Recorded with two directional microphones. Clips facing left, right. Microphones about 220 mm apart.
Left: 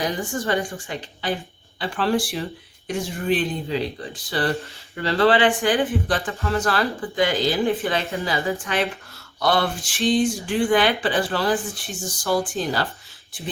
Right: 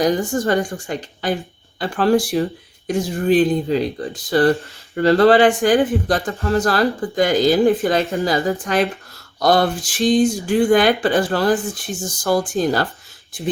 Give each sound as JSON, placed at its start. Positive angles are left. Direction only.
{"t": 0.0, "sound": "a woman's voice", "side_deg": -40}